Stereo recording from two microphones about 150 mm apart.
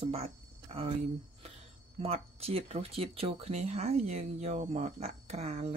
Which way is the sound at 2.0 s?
40° right (ahead or behind).